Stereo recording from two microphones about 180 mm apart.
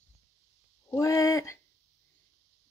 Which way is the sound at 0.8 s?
15° left (ahead or behind).